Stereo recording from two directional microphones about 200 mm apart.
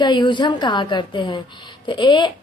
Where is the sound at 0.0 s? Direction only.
20° left (ahead or behind).